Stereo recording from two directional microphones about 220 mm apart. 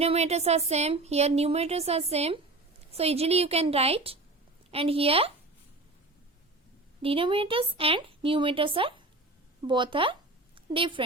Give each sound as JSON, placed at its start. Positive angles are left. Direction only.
{"t": 0.0, "sound": "speech", "side_deg": -30}
{"t": 7.0, "sound": "speech", "side_deg": -25}